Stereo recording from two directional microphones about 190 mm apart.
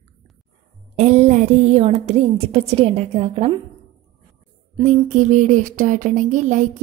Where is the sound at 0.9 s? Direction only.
35° right (ahead or behind).